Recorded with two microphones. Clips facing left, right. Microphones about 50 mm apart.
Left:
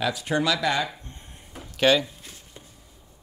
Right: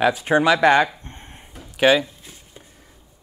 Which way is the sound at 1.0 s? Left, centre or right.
Right.